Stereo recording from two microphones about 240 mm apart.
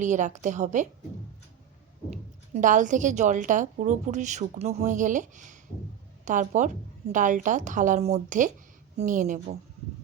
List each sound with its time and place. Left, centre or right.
0.0 s a woman's voice: right
2.0 s a woman's voice: right